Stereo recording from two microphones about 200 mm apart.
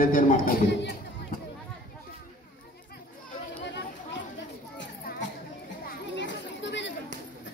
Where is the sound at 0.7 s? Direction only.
60° left (ahead or behind).